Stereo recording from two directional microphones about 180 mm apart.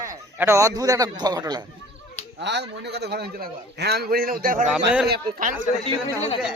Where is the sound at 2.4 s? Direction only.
70° right (ahead or behind); by 5.5 s 50° right (ahead or behind).